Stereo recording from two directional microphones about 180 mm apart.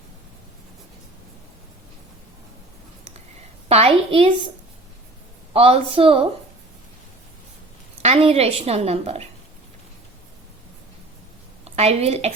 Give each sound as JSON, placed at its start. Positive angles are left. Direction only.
{"t": 3.7, "sound": "a woman's voice", "side_deg": -35}
{"t": 5.5, "sound": "a woman's voice", "side_deg": -30}
{"t": 8.0, "sound": "a woman's voice", "side_deg": -35}
{"t": 11.6, "sound": "a woman's voice", "side_deg": -35}